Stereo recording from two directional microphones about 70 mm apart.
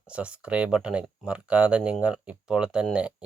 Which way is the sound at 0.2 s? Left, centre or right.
Centre.